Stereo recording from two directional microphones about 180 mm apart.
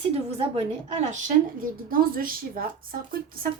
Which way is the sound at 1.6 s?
50° right (ahead or behind).